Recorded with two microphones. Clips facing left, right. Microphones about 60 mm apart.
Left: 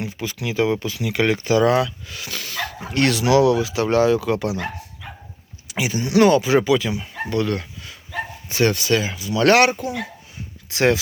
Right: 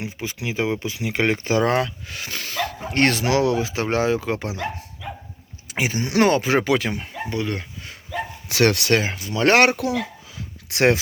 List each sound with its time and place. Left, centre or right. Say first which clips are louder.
0.0 s speech: left 2 dB; right
5.6 s speech: even; right
7.3 s speech: left 4 dB; right
8.4 s speech: right 1 dB; right
9.0 s speech: left 1 dB; right
9.4 s speech: left 1 dB; right
9.7 s speech: right 3 dB; right
10.7 s speech: even; right